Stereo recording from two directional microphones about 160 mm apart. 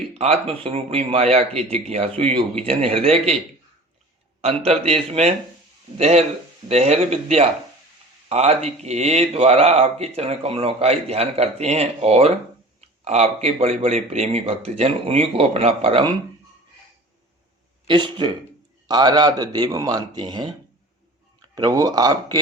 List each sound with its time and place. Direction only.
0.1 s speech: 40° right (ahead or behind)
4.4 s speech: 40° right (ahead or behind)
17.8 s a man's voice: 30° right (ahead or behind)
21.5 s a man's voice: 20° right (ahead or behind)